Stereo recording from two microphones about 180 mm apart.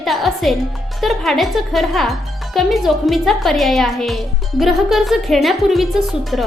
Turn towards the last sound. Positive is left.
turn(degrees=0)  # may be behind; listen again after turning